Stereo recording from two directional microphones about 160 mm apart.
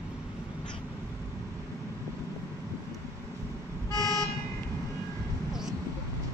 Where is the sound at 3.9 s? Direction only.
25° right (ahead or behind).